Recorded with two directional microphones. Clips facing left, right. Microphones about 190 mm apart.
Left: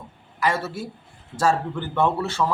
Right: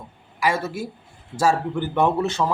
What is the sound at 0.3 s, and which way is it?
Speech, 10° right (ahead or behind).